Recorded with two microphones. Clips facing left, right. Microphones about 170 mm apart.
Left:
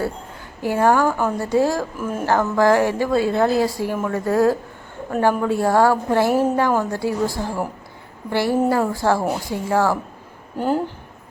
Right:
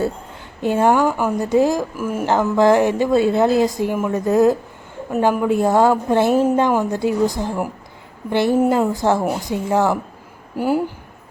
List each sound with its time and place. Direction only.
0.6 s speech: 20° right (ahead or behind)
2.2 s a woman's voice: 20° right (ahead or behind)
10.6 s speech: 10° right (ahead or behind)